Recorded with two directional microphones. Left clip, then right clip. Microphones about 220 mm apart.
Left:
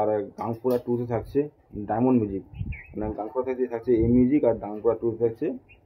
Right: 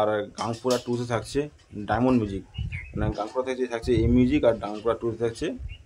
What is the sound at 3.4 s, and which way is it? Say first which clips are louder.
A man's voice: left 4 dB; 5° right (ahead or behind).